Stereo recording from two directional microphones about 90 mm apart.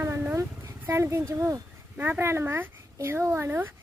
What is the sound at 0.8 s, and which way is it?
A child's voice, 30° right (ahead or behind).